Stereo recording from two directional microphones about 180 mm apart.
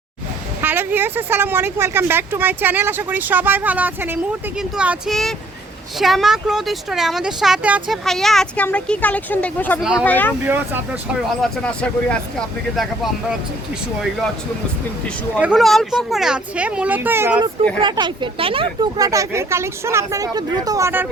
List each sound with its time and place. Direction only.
0.6 s speech: 10° right (ahead or behind); by 10.3 s 10° left (ahead or behind)
11.1 s speech: centre (ahead or behind)
15.4 s speech: 5° right (ahead or behind)
17.7 s speech: 25° right (ahead or behind)